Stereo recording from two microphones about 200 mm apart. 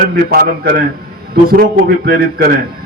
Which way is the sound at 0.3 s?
50° right (ahead or behind).